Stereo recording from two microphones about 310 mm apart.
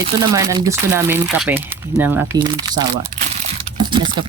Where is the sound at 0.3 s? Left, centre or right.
Centre.